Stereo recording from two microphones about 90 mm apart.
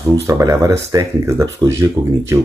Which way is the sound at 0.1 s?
35° right (ahead or behind).